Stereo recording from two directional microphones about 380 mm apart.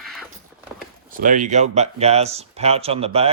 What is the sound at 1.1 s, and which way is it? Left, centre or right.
Speech, right.